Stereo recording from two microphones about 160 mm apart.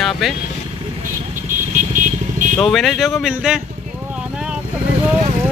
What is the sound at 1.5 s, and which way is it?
Vehicle, 55° right (ahead or behind).